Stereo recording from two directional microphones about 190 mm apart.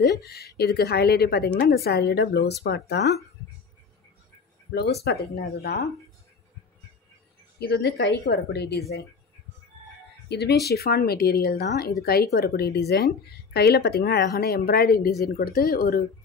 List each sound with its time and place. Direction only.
0.0 s speech: 60° left (ahead or behind)
5.3 s speech: 60° left (ahead or behind)
7.5 s speech: 60° left (ahead or behind)
10.2 s speech: 60° left (ahead or behind)